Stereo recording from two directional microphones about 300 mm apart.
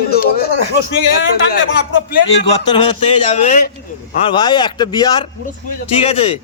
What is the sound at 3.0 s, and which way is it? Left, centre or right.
A man's voice, left.